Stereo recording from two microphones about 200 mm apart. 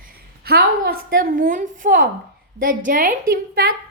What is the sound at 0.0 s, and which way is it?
A woman's voice, 50° right (ahead or behind).